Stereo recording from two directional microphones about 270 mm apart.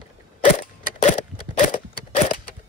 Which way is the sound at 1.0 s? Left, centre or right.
Left.